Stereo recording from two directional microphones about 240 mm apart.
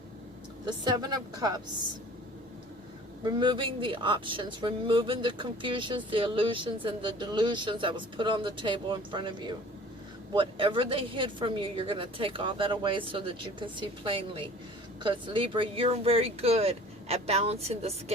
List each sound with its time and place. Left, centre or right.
0.6 s a woman's voice: centre
3.2 s speech: centre